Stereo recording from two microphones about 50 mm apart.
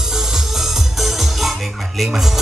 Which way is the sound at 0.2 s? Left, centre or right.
Centre.